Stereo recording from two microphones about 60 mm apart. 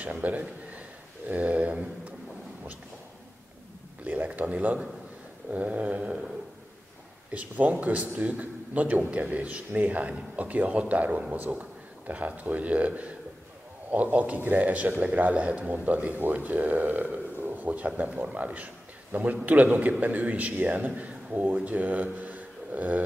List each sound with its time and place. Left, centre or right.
0.0 s a man's voice: right
4.0 s a man's voice: right
7.3 s a man's voice: right